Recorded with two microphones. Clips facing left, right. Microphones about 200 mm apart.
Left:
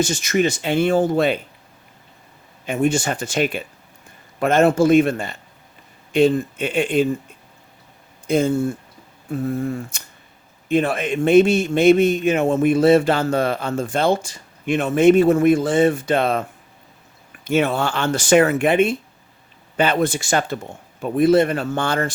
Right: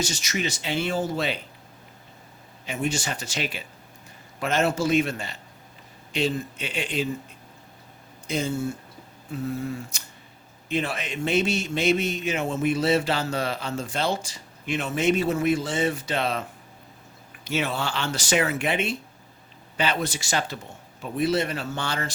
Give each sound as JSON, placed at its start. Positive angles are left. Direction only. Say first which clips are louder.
{"t": 0.0, "sound": "speech", "louder": "left 10 dB", "side_deg": 50}
{"t": 2.6, "sound": "speech", "louder": "left 9 dB", "side_deg": 50}
{"t": 8.3, "sound": "speech", "louder": "left 9 dB", "side_deg": 55}